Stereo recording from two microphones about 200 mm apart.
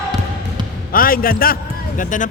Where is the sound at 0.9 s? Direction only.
45° left (ahead or behind).